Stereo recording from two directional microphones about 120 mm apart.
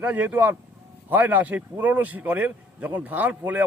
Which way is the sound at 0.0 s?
15° right (ahead or behind).